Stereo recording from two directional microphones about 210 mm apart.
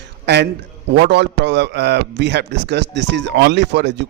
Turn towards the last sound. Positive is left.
turn(degrees=-55)  # may be behind; listen again after turning